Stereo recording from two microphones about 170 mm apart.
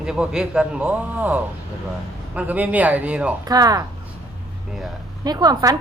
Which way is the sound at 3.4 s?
20° right (ahead or behind).